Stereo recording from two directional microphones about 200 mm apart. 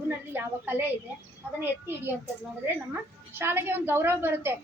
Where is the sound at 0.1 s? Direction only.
10° right (ahead or behind).